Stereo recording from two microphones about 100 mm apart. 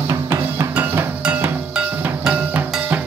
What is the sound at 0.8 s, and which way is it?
Music, 20° right (ahead or behind).